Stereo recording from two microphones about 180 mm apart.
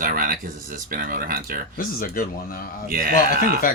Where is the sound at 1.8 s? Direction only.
50° left (ahead or behind).